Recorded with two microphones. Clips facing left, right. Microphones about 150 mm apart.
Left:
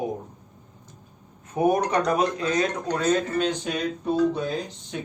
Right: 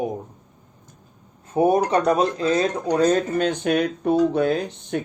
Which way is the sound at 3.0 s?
50° right (ahead or behind).